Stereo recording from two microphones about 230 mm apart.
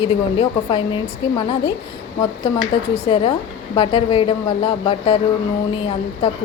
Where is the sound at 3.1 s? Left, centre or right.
Left.